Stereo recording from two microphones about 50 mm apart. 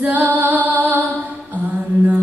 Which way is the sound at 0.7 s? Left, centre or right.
Right.